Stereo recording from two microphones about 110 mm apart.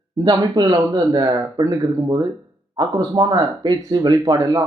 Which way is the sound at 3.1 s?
40° right (ahead or behind).